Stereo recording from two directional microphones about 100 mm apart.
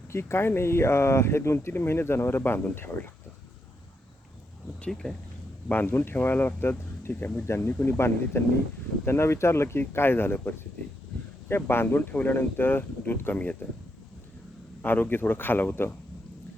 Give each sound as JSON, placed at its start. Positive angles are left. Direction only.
{"t": 0.1, "sound": "speech", "side_deg": 25}
{"t": 4.8, "sound": "speech", "side_deg": 5}
{"t": 5.6, "sound": "speech", "side_deg": 20}
{"t": 14.8, "sound": "speech", "side_deg": 20}